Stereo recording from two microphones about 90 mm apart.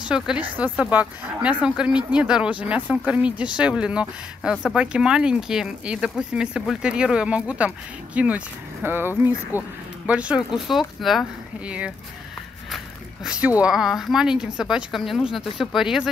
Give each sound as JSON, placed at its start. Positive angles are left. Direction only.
{"t": 0.0, "sound": "speech", "side_deg": -10}
{"t": 11.0, "sound": "speech", "side_deg": 0}
{"t": 11.6, "sound": "speech", "side_deg": -15}